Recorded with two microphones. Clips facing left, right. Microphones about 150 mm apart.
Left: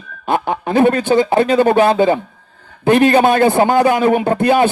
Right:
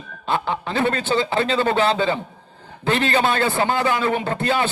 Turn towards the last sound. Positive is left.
turn(degrees=15)  # may be behind; listen again after turning